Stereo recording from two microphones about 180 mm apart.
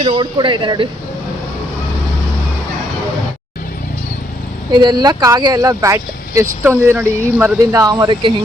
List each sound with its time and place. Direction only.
0.0 s speech: 30° right (ahead or behind)
4.7 s speech: 25° right (ahead or behind)